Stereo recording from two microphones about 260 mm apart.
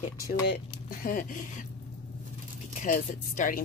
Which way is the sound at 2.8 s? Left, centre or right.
Left.